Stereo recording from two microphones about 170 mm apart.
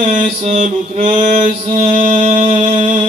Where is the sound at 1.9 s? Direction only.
50° right (ahead or behind).